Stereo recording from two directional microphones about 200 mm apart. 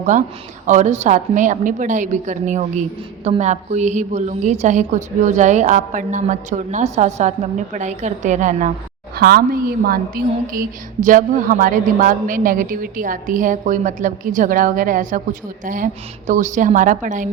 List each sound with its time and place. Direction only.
0.0 s a woman's voice: 40° right (ahead or behind)
9.1 s a woman's voice: 50° right (ahead or behind)